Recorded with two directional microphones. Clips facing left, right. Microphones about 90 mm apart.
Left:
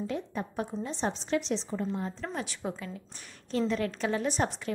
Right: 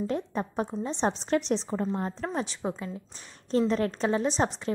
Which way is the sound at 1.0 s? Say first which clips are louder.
Right 4 dB; 45° right (ahead or behind).